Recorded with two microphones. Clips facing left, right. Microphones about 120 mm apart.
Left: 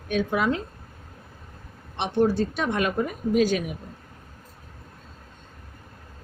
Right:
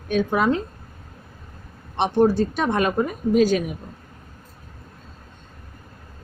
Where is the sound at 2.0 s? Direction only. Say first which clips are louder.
Right 4 dB; 45° right (ahead or behind).